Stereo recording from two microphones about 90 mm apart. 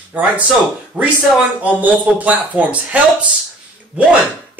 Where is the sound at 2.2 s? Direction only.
15° right (ahead or behind).